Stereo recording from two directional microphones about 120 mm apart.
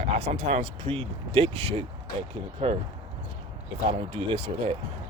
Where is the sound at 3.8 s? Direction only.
50° right (ahead or behind).